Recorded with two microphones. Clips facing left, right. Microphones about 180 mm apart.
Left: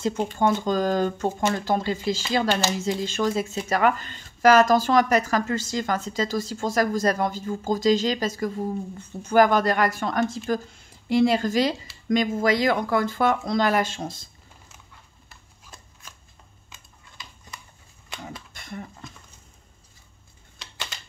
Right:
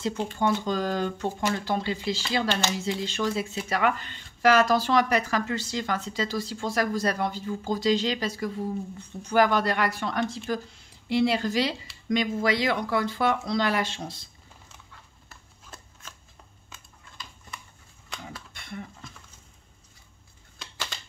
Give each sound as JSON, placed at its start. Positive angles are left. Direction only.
{"t": 0.0, "sound": "speech", "side_deg": 45}
{"t": 18.5, "sound": "dishes", "side_deg": 40}